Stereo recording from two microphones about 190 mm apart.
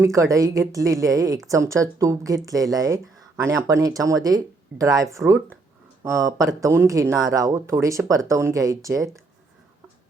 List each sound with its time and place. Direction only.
0.0 s speech: 15° right (ahead or behind)